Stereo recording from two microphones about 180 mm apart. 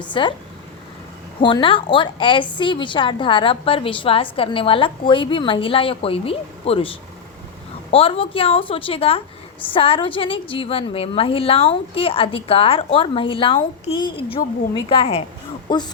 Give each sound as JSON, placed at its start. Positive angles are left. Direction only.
{"t": 0.1, "sound": "a woman's voice", "side_deg": 25}
{"t": 1.4, "sound": "a woman's voice", "side_deg": 25}